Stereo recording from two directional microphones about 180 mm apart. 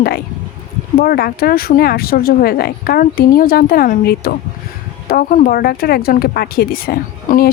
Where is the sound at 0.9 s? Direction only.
55° left (ahead or behind).